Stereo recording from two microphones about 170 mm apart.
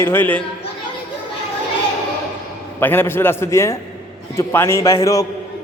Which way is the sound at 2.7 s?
10° left (ahead or behind).